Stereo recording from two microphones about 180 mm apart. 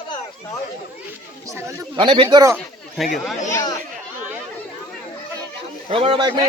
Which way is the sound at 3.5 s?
20° left (ahead or behind).